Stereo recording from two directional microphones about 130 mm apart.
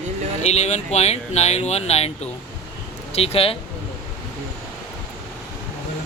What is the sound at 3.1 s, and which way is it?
Speech, 50° left (ahead or behind).